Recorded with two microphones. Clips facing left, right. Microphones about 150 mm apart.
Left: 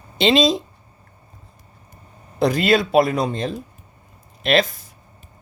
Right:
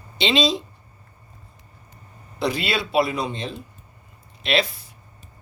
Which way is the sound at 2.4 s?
45° left (ahead or behind).